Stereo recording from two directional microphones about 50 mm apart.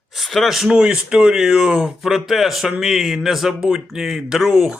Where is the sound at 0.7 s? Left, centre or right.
Centre.